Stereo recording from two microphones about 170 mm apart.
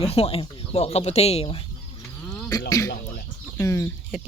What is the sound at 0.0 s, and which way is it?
Speech, 35° left (ahead or behind).